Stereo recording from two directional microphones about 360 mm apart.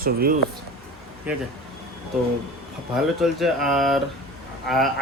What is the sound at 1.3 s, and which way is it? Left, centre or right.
Speech, centre.